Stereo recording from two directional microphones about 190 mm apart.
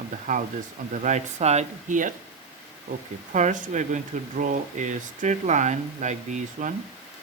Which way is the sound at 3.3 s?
40° right (ahead or behind).